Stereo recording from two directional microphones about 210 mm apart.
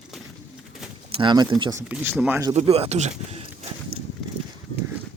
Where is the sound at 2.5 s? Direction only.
30° right (ahead or behind).